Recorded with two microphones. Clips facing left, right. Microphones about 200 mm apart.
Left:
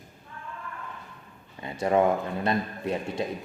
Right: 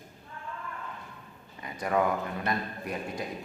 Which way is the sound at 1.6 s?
25° left (ahead or behind).